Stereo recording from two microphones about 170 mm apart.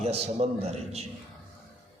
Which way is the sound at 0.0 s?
40° right (ahead or behind).